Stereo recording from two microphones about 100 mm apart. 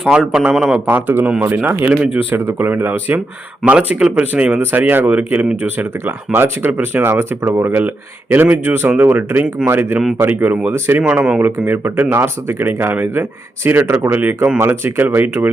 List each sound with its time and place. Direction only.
0.0 s a man's voice: 5° right (ahead or behind)
0.9 s speech: 20° right (ahead or behind)